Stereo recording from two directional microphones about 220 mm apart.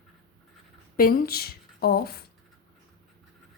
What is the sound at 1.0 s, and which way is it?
A woman's voice, 40° left (ahead or behind).